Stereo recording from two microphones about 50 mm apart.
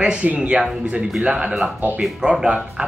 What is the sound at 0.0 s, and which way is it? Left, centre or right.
Speech, centre.